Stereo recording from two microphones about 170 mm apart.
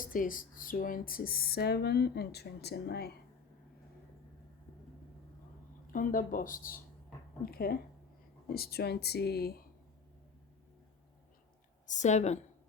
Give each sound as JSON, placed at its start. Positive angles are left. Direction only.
{"t": 0.0, "sound": "speech", "side_deg": 55}
{"t": 5.9, "sound": "speech", "side_deg": 55}
{"t": 11.9, "sound": "a woman's voice", "side_deg": 45}